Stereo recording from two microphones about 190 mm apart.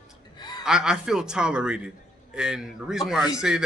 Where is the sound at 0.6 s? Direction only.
5° right (ahead or behind).